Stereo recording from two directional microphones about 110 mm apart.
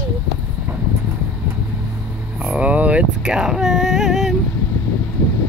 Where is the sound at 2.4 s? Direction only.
10° right (ahead or behind).